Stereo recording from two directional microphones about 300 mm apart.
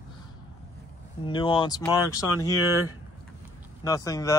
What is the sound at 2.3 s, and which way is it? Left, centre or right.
Speech, left.